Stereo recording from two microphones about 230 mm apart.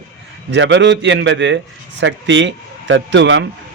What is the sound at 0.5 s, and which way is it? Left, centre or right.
A man's voice, right.